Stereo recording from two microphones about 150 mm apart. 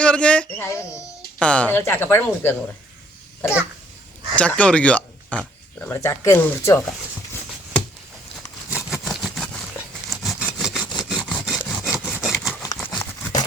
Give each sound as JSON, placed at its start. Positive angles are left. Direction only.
{"t": 0.0, "sound": "speech", "side_deg": 5}
{"t": 0.6, "sound": "a child's voice", "side_deg": 20}
{"t": 1.4, "sound": "speech", "side_deg": 10}
{"t": 4.4, "sound": "speech", "side_deg": 10}
{"t": 8.7, "sound": "vehicle", "side_deg": 0}
{"t": 10.1, "sound": "sawing", "side_deg": 0}
{"t": 12.8, "sound": "crumpling", "side_deg": 10}